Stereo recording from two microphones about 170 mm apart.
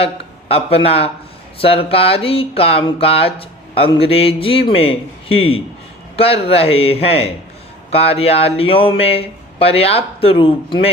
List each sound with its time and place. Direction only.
0.0 s speech: 35° left (ahead or behind)